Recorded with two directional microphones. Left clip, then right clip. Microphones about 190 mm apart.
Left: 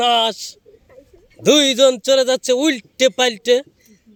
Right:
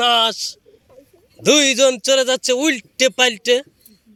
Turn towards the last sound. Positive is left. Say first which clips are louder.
# left 1 dB
turn(degrees=5)  # may be behind; listen again after turning